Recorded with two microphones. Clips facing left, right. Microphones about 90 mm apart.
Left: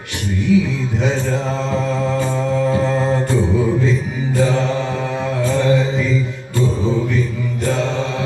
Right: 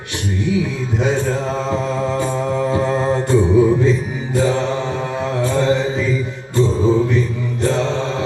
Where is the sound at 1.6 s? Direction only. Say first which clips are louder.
Even; 15° right (ahead or behind).